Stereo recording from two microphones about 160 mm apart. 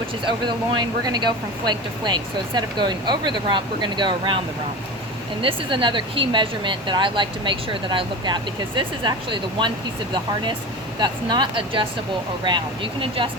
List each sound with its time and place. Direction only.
0.4 s speech: 25° right (ahead or behind)
5.4 s speech: 30° right (ahead or behind)
11.0 s speech: 30° right (ahead or behind)